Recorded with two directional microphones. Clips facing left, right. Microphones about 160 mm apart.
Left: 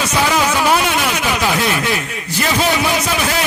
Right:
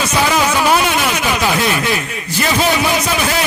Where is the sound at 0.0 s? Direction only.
10° right (ahead or behind).